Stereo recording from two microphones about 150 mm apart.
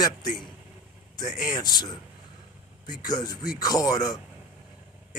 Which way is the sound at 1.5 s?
25° left (ahead or behind).